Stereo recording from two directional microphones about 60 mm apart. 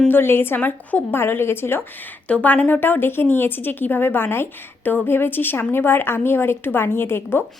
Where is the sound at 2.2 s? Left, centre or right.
Left.